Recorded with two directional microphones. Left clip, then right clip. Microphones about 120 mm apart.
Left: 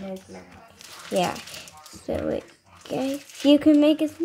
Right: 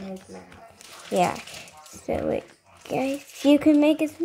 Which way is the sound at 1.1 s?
5° right (ahead or behind).